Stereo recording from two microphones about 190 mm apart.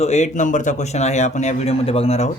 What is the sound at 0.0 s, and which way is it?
Speech, 35° left (ahead or behind).